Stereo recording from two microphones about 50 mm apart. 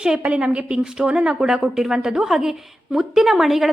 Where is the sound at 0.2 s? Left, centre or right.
Right.